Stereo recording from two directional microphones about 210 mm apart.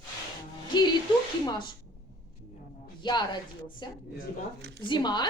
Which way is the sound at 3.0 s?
20° left (ahead or behind).